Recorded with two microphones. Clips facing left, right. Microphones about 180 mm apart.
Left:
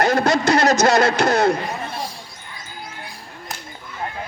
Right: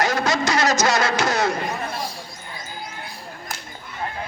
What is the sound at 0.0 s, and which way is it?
A man's voice, 55° left (ahead or behind).